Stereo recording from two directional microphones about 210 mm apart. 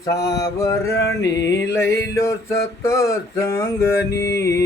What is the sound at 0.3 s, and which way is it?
Mantra, 15° left (ahead or behind).